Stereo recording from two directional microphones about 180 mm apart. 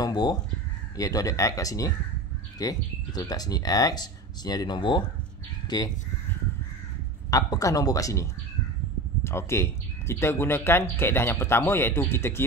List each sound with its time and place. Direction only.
0.0 s crow: 20° left (ahead or behind)
0.9 s speech: 20° left (ahead or behind)
7.2 s speech: 20° left (ahead or behind)